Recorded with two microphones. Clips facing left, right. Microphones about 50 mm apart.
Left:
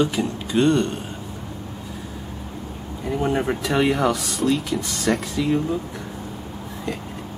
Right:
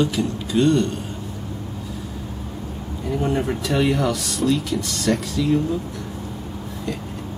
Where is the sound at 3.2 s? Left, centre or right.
Centre.